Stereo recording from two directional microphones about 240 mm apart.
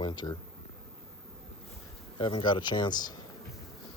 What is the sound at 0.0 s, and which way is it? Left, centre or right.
Speech, centre.